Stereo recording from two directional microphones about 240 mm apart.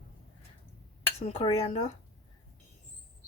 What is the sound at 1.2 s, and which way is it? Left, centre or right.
Speech, left.